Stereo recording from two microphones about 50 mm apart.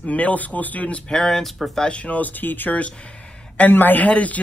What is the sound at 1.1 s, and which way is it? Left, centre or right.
Speech, centre.